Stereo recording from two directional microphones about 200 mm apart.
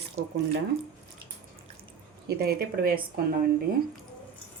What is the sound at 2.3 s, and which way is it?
A woman's voice, 50° right (ahead or behind).